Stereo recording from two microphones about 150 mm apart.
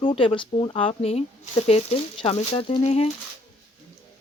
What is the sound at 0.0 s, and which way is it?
Speech, 35° left (ahead or behind).